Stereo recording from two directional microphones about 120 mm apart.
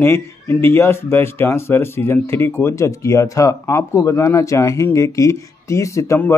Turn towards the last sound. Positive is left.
turn(degrees=25)  # may be behind; listen again after turning